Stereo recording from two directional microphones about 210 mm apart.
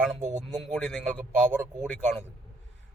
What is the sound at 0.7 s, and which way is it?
Speech, 5° left (ahead or behind).